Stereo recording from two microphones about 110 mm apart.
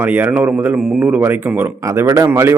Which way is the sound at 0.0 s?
15° right (ahead or behind).